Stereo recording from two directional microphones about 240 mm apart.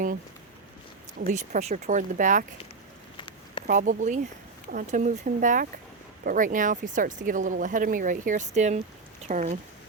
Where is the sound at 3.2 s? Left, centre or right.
Left.